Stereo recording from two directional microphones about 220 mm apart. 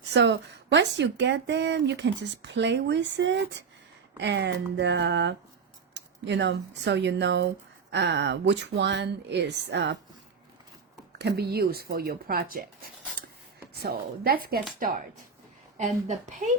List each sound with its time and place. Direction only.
0.1 s speech: 50° right (ahead or behind)
11.2 s speech: 45° right (ahead or behind)
13.7 s a woman's voice: 45° right (ahead or behind)